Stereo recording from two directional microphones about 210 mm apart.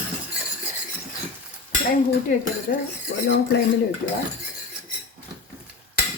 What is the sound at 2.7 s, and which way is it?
Speech, 50° left (ahead or behind).